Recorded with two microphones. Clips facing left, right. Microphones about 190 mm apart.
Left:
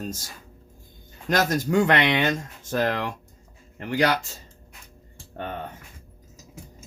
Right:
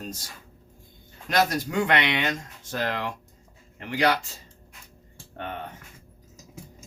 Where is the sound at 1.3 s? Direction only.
45° left (ahead or behind).